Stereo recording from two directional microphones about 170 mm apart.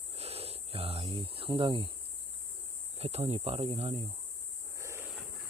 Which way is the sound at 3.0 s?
40° right (ahead or behind).